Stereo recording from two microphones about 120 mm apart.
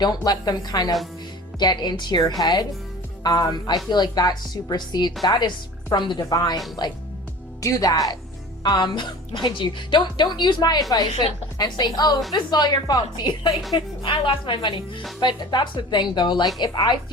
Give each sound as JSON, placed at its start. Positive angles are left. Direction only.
{"t": 0.0, "sound": "a woman's voice", "side_deg": 35}
{"t": 7.6, "sound": "a woman's voice", "side_deg": 30}